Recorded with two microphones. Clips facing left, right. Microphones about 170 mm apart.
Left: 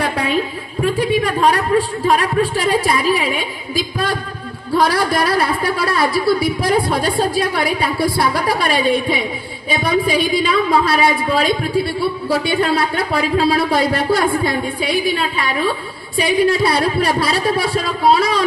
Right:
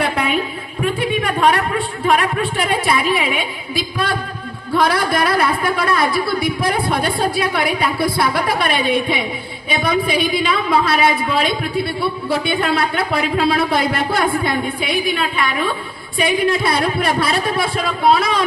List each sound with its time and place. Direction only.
2.0 s a woman's voice: 40° left (ahead or behind)